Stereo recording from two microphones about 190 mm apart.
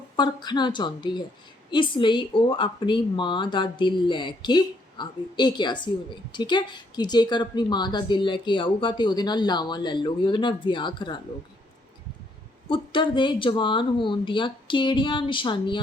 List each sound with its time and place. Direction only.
0.2 s a woman's voice: 25° left (ahead or behind)
12.6 s a woman's voice: 25° left (ahead or behind)